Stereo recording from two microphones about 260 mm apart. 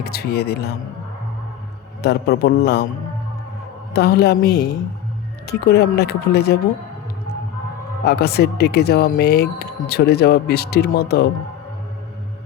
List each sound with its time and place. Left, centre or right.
0.0 s speech: left
2.0 s speech: left
3.9 s speech: left
8.0 s speech: left